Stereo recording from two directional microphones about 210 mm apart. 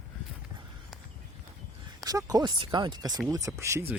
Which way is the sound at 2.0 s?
15° right (ahead or behind).